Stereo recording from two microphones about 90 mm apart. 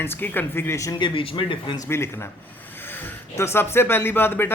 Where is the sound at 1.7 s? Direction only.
30° left (ahead or behind).